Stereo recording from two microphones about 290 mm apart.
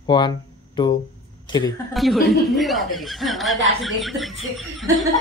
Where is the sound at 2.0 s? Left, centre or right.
Centre.